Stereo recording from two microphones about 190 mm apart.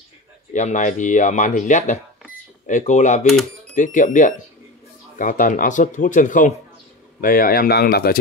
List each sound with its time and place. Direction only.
0.5 s speech: 40° left (ahead or behind)